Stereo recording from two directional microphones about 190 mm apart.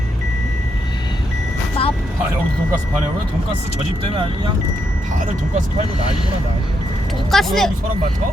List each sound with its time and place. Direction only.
1.8 s vehicle: 30° left (ahead or behind)
7.3 s speech: centre (ahead or behind)